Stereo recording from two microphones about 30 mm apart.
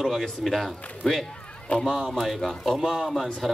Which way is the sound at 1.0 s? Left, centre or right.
Left.